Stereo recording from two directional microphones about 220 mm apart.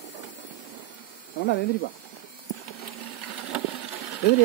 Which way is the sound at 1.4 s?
55° left (ahead or behind).